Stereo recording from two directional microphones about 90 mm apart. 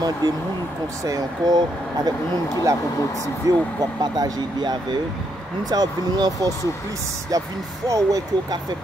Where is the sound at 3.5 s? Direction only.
40° right (ahead or behind).